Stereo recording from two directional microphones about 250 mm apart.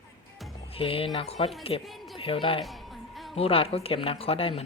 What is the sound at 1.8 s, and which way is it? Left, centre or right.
Speech, centre.